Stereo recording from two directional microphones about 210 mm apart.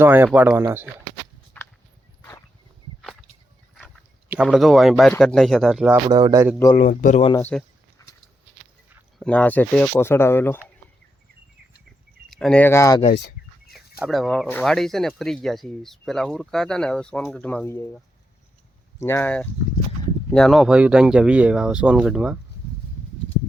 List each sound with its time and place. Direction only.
0.0 s speech: 10° right (ahead or behind)
1.5 s a sound: 10° left (ahead or behind)
3.8 s a sound: centre (ahead or behind)
5.1 s speech: centre (ahead or behind)
6.1 s speech: 20° right (ahead or behind)
6.7 s speech: 35° left (ahead or behind)
7.5 s speech: 5° left (ahead or behind)
8.0 s clip-clop: 15° left (ahead or behind)
9.1 s speech: 5° left (ahead or behind)
12.3 s speech: 5° left (ahead or behind)
13.7 s speech: centre (ahead or behind)